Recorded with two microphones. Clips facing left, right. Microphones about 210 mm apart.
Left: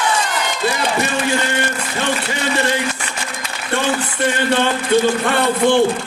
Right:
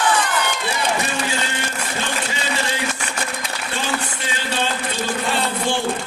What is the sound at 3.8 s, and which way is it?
A man's voice, 60° left (ahead or behind).